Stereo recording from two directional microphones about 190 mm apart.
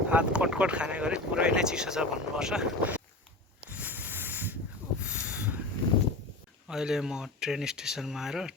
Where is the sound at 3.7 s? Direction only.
10° right (ahead or behind).